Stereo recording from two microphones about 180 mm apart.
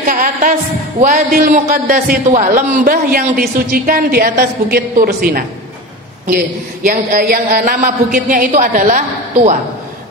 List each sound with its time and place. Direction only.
0.1 s a man's voice: 50° right (ahead or behind)